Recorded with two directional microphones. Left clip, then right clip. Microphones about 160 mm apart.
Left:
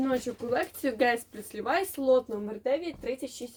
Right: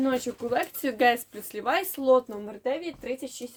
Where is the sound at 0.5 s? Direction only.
40° right (ahead or behind).